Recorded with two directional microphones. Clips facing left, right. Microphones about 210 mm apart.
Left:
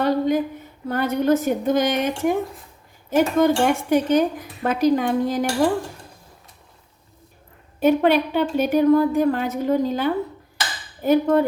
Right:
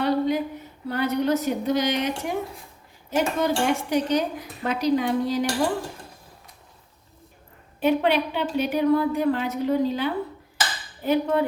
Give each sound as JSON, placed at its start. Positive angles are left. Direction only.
{"t": 0.0, "sound": "a sound", "side_deg": 50}
{"t": 0.9, "sound": "speech", "side_deg": 50}
{"t": 7.8, "sound": "speech", "side_deg": 45}